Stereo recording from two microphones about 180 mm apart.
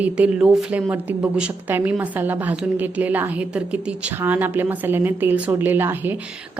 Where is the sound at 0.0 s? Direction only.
5° right (ahead or behind).